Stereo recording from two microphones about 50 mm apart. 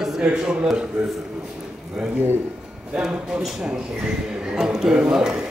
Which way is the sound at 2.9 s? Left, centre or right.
Centre.